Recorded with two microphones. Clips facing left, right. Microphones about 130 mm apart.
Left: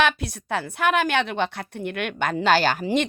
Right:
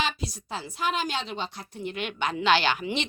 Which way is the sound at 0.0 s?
60° left (ahead or behind).